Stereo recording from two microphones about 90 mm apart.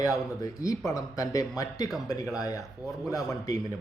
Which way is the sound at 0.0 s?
40° left (ahead or behind).